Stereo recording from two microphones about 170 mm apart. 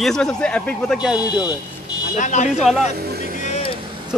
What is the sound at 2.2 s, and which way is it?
Speech, 45° left (ahead or behind).